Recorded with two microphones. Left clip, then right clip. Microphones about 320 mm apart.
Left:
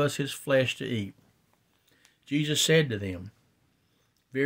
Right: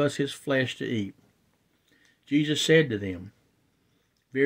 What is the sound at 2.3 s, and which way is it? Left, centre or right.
Speech, left.